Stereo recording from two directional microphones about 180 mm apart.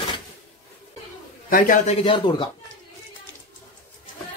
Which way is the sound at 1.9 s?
30° left (ahead or behind).